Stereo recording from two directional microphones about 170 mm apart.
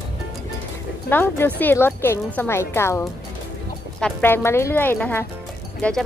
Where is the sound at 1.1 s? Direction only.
10° left (ahead or behind).